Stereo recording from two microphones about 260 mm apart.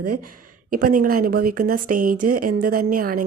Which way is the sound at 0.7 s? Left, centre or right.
Right.